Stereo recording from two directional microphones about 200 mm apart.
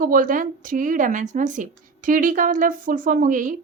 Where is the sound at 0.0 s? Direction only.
45° right (ahead or behind).